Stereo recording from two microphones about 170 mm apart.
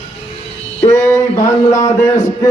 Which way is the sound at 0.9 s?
15° left (ahead or behind).